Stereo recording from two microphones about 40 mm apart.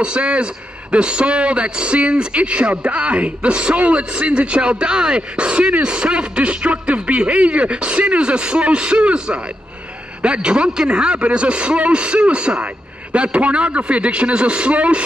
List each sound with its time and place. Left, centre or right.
0.0 s a man's voice: right